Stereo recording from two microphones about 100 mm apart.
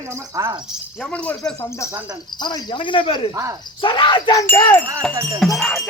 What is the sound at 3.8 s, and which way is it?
Speech, 55° left (ahead or behind).